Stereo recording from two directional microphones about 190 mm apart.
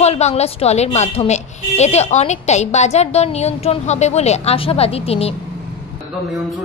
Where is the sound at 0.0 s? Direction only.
35° left (ahead or behind).